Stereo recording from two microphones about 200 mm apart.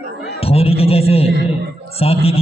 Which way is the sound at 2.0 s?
30° left (ahead or behind).